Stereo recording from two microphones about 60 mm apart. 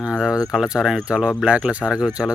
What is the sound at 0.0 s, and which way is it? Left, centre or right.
Speech, centre.